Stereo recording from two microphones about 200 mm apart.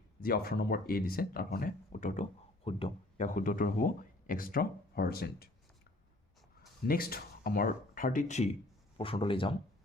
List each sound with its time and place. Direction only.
0.2 s speech: 50° left (ahead or behind)
2.6 s speech: 30° left (ahead or behind); by 5.5 s 50° left (ahead or behind)
6.8 s speech: 50° left (ahead or behind); by 9.6 s 25° left (ahead or behind)